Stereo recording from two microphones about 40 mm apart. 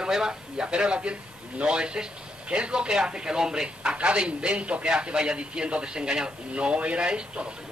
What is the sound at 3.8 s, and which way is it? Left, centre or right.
A man's voice, right.